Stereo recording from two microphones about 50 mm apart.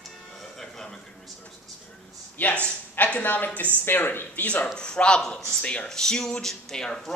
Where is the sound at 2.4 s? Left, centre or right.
Left.